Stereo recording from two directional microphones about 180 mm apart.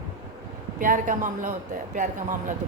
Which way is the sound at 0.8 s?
45° right (ahead or behind).